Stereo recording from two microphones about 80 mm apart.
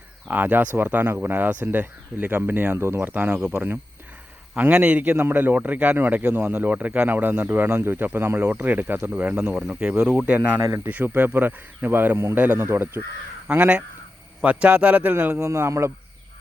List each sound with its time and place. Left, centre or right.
0.3 s speech: right
13.5 s speech: centre
15.4 s a man's voice: right